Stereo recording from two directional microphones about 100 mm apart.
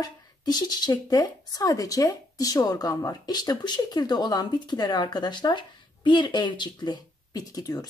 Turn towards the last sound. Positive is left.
turn(degrees=40)  # may be behind; listen again after turning